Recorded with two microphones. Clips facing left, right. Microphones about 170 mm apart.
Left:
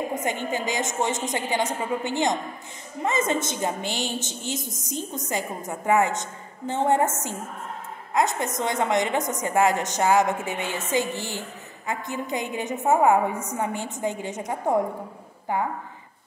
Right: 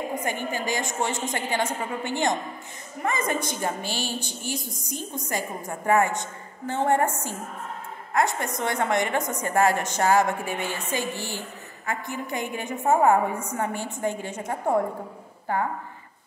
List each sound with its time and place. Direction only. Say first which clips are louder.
0.1 s a woman's voice: left 2 dB; 20° left (ahead or behind)
8.1 s a woman's voice: left 1 dB; 20° left (ahead or behind)